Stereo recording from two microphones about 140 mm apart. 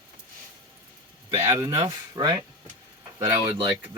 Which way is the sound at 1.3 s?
20° right (ahead or behind).